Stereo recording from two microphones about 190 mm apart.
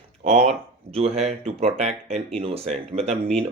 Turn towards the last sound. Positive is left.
turn(degrees=-35)  # may be behind; listen again after turning